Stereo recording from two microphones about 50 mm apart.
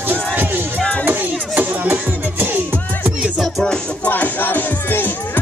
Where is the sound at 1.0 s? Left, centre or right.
Right.